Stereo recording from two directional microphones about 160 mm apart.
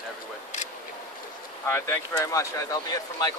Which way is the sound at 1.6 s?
15° left (ahead or behind).